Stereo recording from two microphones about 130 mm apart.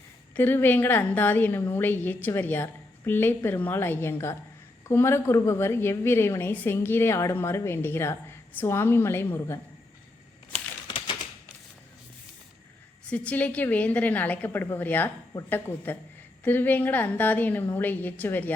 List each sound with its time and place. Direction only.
0.3 s a woman's voice: 15° left (ahead or behind)
10.8 s typewriter: 40° left (ahead or behind)
13.1 s a woman's voice: 10° left (ahead or behind)